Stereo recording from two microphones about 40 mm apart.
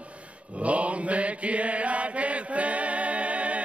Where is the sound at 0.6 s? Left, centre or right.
Right.